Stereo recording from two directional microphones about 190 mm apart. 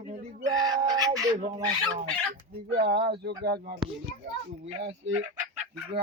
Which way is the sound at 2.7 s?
55° right (ahead or behind).